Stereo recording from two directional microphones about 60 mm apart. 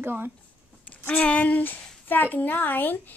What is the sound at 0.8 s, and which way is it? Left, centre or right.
A woman's voice, left.